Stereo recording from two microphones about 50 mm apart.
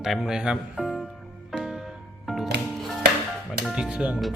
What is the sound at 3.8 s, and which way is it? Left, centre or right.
Speech, right.